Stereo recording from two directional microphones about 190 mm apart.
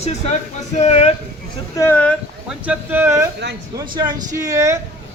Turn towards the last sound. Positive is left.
turn(degrees=-15)  # may be behind; listen again after turning